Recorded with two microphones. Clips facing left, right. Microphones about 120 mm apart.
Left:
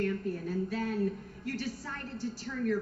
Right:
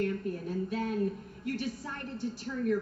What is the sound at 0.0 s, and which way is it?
A woman's voice, 15° right (ahead or behind).